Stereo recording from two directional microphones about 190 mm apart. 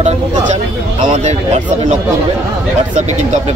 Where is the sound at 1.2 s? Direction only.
35° right (ahead or behind).